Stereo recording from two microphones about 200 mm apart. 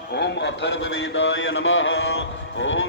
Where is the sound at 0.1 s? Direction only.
55° left (ahead or behind).